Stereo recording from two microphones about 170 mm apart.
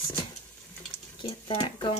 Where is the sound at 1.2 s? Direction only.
35° left (ahead or behind).